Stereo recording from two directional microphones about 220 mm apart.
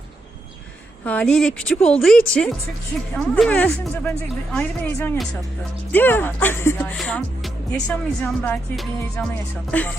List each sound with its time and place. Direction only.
1.0 s a woman's voice: 5° left (ahead or behind)